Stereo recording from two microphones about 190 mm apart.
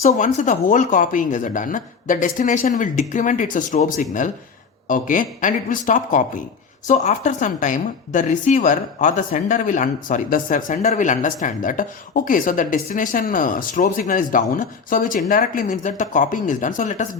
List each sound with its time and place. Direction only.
0.1 s a woman's voice: 40° left (ahead or behind)